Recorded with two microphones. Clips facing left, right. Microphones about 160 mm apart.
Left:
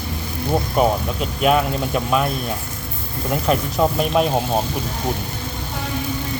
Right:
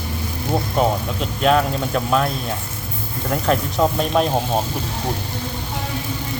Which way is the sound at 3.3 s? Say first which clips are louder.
Even; 5° left (ahead or behind).